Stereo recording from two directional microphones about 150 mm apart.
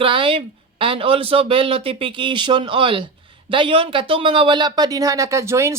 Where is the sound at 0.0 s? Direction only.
35° right (ahead or behind).